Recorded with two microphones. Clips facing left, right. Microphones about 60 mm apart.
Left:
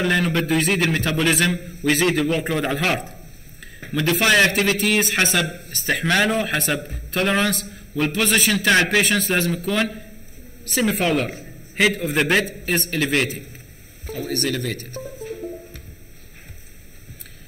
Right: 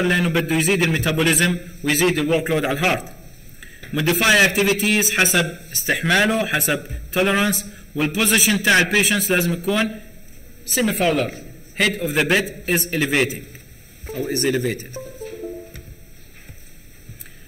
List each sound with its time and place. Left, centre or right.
0.1 s a man's voice: centre